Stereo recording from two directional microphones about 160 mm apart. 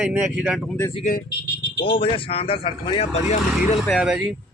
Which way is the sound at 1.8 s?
35° left (ahead or behind).